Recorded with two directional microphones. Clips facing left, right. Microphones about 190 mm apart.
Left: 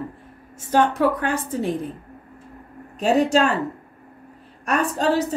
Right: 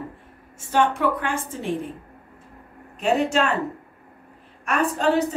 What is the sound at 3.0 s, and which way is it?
Speech, 35° left (ahead or behind).